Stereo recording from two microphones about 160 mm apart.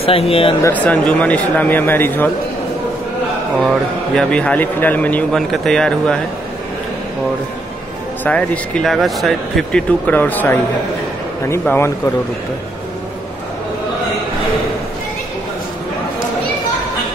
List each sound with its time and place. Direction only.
0.0 s speech: 35° left (ahead or behind)
0.7 s speech: 10° left (ahead or behind)
3.6 s a man's voice: 5° left (ahead or behind)
8.2 s speech: 10° left (ahead or behind)
11.6 s speech: 15° left (ahead or behind)